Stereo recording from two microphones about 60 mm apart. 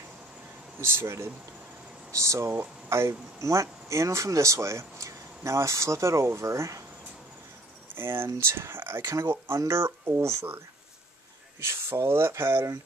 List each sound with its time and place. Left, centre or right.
0.7 s speech: right
2.5 s speech: right
7.9 s speech: right
11.6 s speech: right